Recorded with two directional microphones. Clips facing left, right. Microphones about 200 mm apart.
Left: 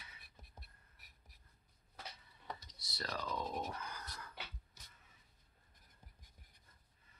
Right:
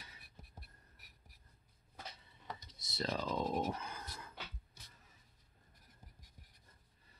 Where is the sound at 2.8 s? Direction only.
25° right (ahead or behind).